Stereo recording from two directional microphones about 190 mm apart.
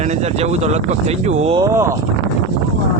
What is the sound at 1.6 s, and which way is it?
Speech, 15° right (ahead or behind).